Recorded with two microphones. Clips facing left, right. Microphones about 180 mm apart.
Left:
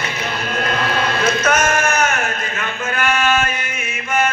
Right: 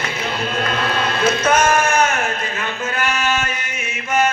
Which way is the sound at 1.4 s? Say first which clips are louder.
Right 4 dB; 30° right (ahead or behind).